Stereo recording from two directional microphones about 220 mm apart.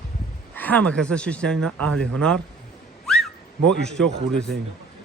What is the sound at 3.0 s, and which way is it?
Whistling, centre (ahead or behind).